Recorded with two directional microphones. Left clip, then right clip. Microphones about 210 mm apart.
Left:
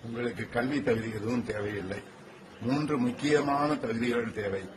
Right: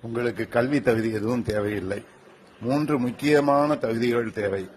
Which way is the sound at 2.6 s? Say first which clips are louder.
Right 5 dB; 30° right (ahead or behind).